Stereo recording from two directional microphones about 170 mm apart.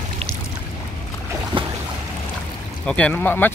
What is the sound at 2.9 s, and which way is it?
Speech, 5° left (ahead or behind).